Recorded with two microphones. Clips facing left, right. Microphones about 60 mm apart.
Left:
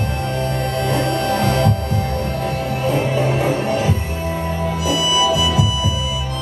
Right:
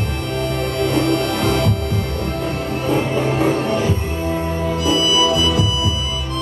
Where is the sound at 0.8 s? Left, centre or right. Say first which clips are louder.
Right 3 dB; right.